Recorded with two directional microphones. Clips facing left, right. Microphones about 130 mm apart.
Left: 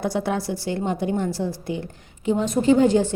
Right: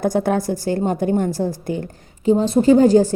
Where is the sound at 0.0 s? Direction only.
45° right (ahead or behind).